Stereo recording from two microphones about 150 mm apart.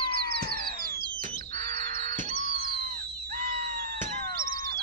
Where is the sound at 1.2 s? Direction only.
70° right (ahead or behind).